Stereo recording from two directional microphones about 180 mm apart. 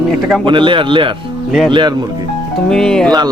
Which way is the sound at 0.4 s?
25° right (ahead or behind).